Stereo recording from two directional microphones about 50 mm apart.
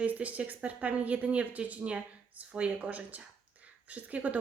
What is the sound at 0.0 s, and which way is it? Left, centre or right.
Speech, right.